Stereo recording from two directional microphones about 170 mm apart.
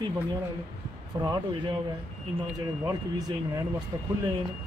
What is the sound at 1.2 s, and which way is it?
Speech, 25° right (ahead or behind).